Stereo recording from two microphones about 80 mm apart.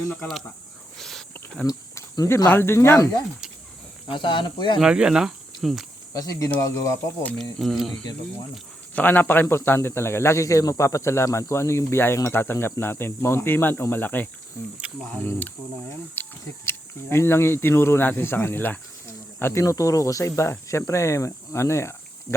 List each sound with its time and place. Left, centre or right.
0.9 s a sound: centre
1.6 s speech: left
2.5 s speech: left
4.1 s speech: left
4.8 s speech: centre
6.1 s speech: left
7.3 s speech: centre
9.0 s speech: left
14.8 s speech: centre
16.2 s a sound: left
16.6 s speech: left
19.6 s speech: left